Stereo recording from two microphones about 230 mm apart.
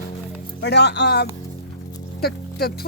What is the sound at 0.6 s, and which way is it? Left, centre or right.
Speech, left.